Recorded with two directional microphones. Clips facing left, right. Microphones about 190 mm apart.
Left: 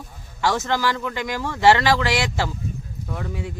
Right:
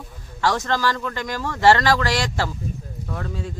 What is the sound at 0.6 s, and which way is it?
Speech, 15° left (ahead or behind).